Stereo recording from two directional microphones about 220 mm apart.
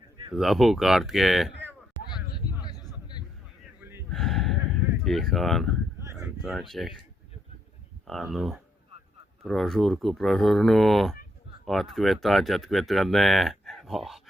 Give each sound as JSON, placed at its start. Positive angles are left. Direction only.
{"t": 0.3, "sound": "speech", "side_deg": 0}
{"t": 2.6, "sound": "a sound", "side_deg": 20}
{"t": 4.1, "sound": "gasp", "side_deg": 0}
{"t": 5.0, "sound": "speech", "side_deg": 0}
{"t": 6.0, "sound": "a sound", "side_deg": -15}
{"t": 6.2, "sound": "speech", "side_deg": 0}
{"t": 8.0, "sound": "speech", "side_deg": 0}